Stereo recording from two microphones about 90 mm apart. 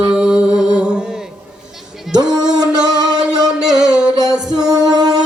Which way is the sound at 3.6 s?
5° right (ahead or behind).